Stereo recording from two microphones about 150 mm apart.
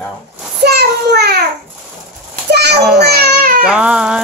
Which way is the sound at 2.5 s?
90° right.